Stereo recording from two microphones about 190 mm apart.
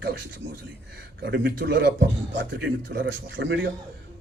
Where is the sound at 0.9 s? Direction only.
65° right (ahead or behind).